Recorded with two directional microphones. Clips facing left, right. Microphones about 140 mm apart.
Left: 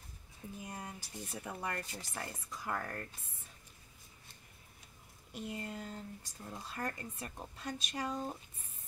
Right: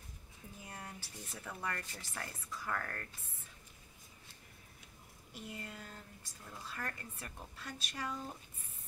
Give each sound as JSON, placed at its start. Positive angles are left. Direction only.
{"t": 0.7, "sound": "speech", "side_deg": 15}
{"t": 5.3, "sound": "speech", "side_deg": 20}